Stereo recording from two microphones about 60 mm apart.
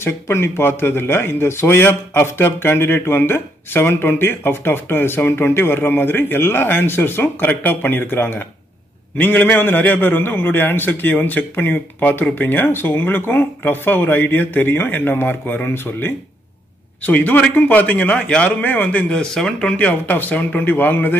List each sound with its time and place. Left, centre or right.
0.0 s speech: left
17.0 s a man's voice: left
19.1 s speech: centre
19.9 s speech: left